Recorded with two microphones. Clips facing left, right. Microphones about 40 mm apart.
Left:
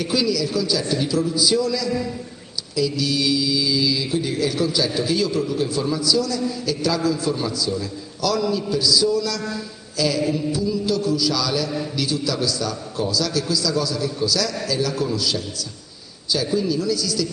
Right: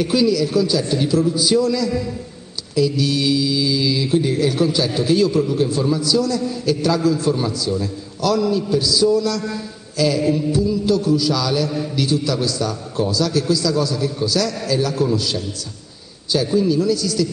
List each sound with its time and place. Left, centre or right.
0.0 s speech: right
2.7 s speech: right
5.8 s a man's voice: centre